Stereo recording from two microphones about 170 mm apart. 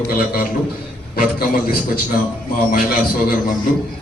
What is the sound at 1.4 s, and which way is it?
Speech, 60° left (ahead or behind).